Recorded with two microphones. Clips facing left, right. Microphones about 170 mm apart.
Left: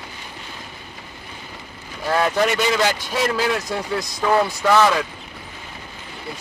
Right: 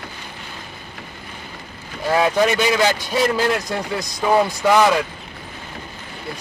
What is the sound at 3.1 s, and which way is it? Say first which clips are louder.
Speech: right 2 dB; centre (ahead or behind).